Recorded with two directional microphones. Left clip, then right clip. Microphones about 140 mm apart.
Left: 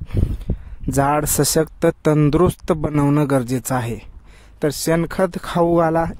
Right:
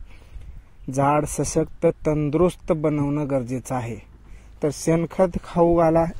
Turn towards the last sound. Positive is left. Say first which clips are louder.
# left 1 dB
turn(degrees=45)  # may be behind; listen again after turning